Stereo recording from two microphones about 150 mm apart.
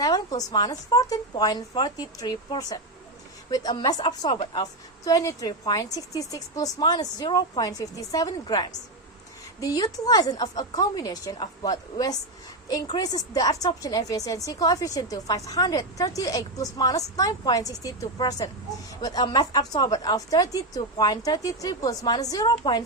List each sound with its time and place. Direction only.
0.0 s a woman's voice: 25° left (ahead or behind)